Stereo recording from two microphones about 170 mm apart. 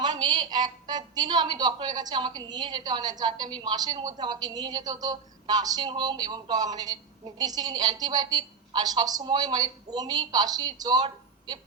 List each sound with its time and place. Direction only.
0.0 s a woman's voice: 25° right (ahead or behind)